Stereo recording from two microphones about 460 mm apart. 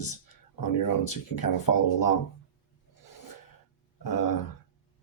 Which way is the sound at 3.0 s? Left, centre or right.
Left.